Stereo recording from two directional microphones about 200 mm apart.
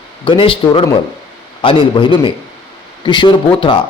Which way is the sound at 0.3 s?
25° left (ahead or behind).